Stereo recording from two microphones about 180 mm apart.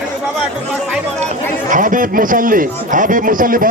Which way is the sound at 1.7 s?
45° right (ahead or behind).